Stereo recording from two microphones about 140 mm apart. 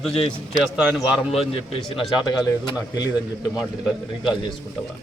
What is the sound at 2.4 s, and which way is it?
Speech, 30° left (ahead or behind).